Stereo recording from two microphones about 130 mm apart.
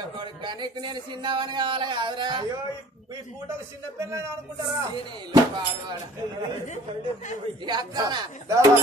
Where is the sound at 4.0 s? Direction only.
20° right (ahead or behind).